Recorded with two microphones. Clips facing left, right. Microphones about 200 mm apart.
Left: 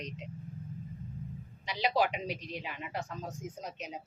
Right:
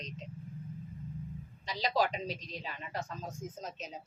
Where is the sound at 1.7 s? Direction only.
15° left (ahead or behind).